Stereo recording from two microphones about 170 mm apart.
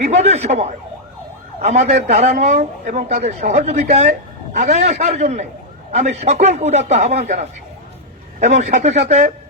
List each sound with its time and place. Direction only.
0.0 s speech: 40° right (ahead or behind)
8.4 s speech: 40° right (ahead or behind)